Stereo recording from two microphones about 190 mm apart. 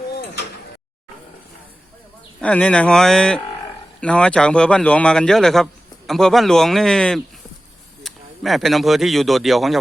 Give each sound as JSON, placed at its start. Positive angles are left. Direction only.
{"t": 2.4, "sound": "a man's voice", "side_deg": 5}